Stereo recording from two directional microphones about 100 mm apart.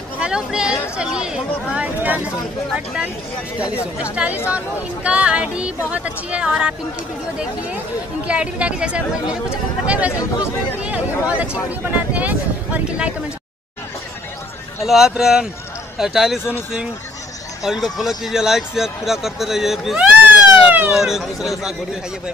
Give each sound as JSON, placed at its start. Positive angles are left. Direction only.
{"t": 0.2, "sound": "speech", "side_deg": -5}
{"t": 4.0, "sound": "speech", "side_deg": -15}
{"t": 8.3, "sound": "speech", "side_deg": -10}
{"t": 14.9, "sound": "speech", "side_deg": -5}
{"t": 17.6, "sound": "speech", "side_deg": 0}
{"t": 20.0, "sound": "a sound", "side_deg": -15}
{"t": 20.9, "sound": "speech", "side_deg": -5}